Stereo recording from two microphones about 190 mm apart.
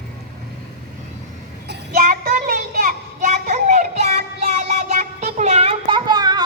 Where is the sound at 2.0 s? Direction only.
45° right (ahead or behind).